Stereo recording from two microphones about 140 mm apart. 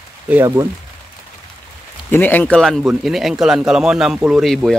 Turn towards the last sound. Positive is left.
turn(degrees=0)  # may be behind; listen again after turning